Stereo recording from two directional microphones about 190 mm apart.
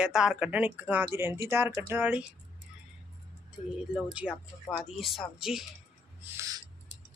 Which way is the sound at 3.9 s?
5° right (ahead or behind).